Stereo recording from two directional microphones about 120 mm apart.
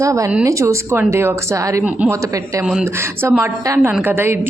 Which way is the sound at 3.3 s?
20° right (ahead or behind).